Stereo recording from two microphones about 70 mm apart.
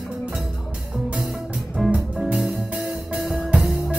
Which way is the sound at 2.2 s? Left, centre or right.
Centre.